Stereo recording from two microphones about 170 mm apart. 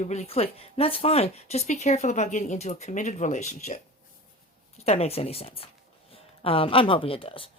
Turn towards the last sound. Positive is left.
turn(degrees=30)  # may be behind; listen again after turning